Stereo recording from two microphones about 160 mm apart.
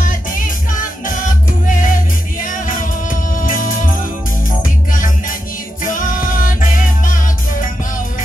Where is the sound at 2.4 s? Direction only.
55° left (ahead or behind).